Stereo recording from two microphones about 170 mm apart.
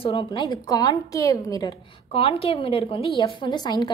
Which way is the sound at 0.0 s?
30° left (ahead or behind).